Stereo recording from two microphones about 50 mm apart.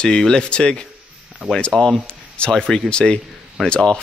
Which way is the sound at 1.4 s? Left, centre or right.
Right.